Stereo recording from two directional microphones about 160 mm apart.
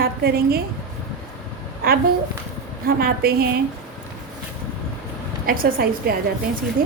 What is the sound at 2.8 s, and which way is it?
Speech, 70° right (ahead or behind).